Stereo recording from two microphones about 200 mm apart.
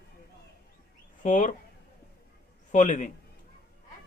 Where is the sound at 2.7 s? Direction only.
40° left (ahead or behind).